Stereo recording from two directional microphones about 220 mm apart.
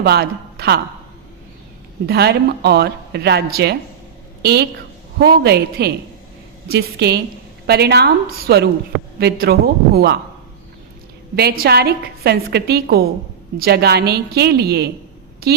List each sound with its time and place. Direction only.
0.0 s a woman's voice: 45° right (ahead or behind)
2.0 s speech: 50° right (ahead or behind)
11.3 s speech: 45° right (ahead or behind)